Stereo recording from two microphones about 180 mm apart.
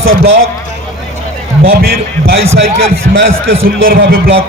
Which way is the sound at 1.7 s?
55° right (ahead or behind).